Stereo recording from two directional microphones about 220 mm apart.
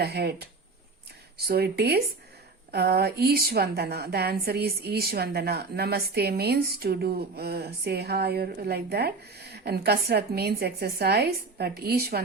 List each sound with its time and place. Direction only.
0.0 s a woman's voice: 45° right (ahead or behind)
1.5 s a woman's voice: 45° right (ahead or behind)